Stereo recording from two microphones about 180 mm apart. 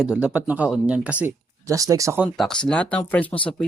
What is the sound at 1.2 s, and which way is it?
Speech, 20° right (ahead or behind).